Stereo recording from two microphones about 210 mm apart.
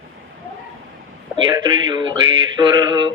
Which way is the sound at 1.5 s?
20° right (ahead or behind).